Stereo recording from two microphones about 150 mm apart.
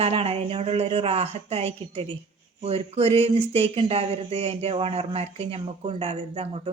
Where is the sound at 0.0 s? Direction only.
40° right (ahead or behind).